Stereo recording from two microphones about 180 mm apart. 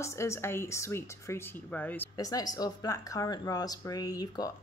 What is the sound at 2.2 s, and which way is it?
Speech, 20° left (ahead or behind).